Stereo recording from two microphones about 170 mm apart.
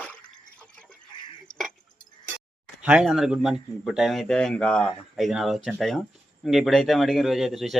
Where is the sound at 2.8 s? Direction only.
5° right (ahead or behind).